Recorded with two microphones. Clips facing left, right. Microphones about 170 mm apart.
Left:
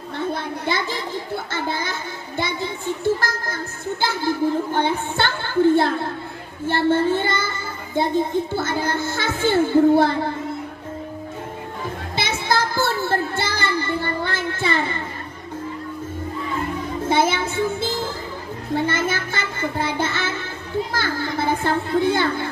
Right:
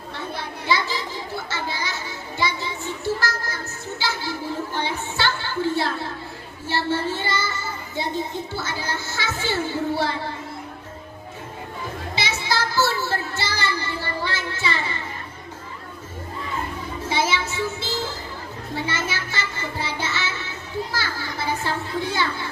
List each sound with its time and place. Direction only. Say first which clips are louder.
0.3 s children playing: left 1 dB; 50° left (ahead or behind)
4.0 s a sound: left 8 dB; 55° left (ahead or behind)
6.7 s child singing: left 6 dB; 55° left (ahead or behind)
12.1 s child singing: left 4 dB; 50° left (ahead or behind)
17.0 s child singing: left 4 dB; 55° left (ahead or behind)
18.7 s music: left 6 dB; 55° left (ahead or behind)
20.9 s children playing: left 6 dB; 55° left (ahead or behind)